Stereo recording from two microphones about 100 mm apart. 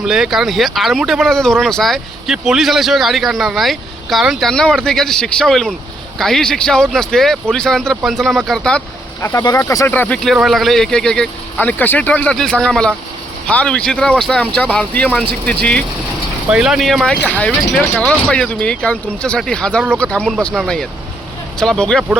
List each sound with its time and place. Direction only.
0.0 s speech: 5° right (ahead or behind)
9.6 s speech: 25° left (ahead or behind)
10.3 s speech: centre (ahead or behind)
11.6 s speech: 15° left (ahead or behind)
16.5 s speech: 10° right (ahead or behind)